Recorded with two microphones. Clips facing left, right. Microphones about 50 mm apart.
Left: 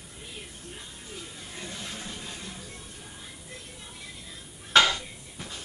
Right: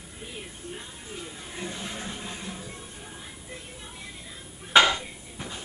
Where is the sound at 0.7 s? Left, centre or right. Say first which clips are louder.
Right 3 dB; centre.